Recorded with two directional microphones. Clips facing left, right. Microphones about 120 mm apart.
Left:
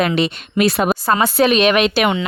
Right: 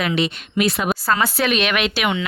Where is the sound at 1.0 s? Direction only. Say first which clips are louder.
Left 5 dB; 25° left (ahead or behind).